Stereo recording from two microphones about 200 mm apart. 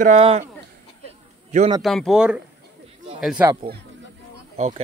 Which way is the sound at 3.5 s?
25° right (ahead or behind).